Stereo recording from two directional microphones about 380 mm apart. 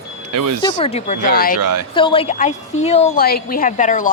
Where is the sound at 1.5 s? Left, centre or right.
Right.